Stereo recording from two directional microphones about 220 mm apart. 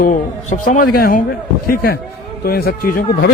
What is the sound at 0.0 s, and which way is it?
A man's voice, 35° left (ahead or behind).